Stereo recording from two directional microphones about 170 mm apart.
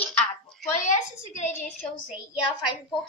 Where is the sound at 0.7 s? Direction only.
45° left (ahead or behind).